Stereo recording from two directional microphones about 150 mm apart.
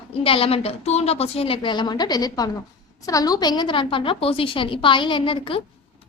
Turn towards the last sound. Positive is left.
turn(degrees=35)  # may be behind; listen again after turning